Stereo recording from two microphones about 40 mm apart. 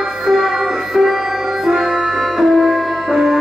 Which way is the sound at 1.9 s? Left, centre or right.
Centre.